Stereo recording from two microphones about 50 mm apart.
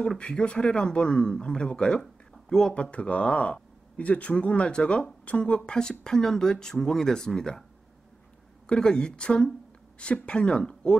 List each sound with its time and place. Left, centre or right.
0.2 s speech: left
2.7 s speech: left
8.6 s speech: centre